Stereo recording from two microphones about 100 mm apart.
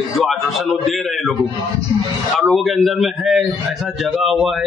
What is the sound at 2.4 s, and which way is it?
A man's voice, centre (ahead or behind).